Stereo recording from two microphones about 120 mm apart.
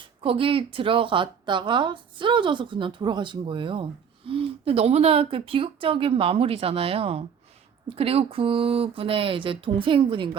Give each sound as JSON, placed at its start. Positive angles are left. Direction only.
{"t": 0.2, "sound": "a woman's voice", "side_deg": -50}